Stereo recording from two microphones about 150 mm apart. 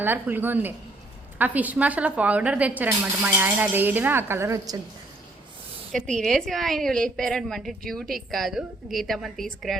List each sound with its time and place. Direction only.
0.0 s speech: 15° right (ahead or behind)
5.9 s a woman's voice: 5° left (ahead or behind)